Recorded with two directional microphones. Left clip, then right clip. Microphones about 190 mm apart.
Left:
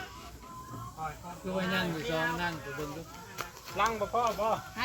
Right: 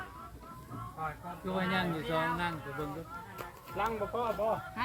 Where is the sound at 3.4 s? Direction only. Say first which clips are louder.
Left 5 dB; 35° left (ahead or behind).